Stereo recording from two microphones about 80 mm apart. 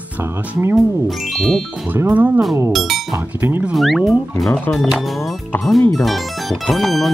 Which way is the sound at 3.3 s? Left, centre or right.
Right.